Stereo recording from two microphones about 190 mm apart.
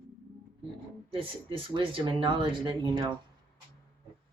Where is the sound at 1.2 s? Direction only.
30° right (ahead or behind).